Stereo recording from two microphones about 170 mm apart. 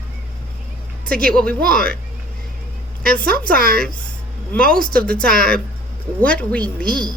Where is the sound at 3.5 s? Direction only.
60° right (ahead or behind).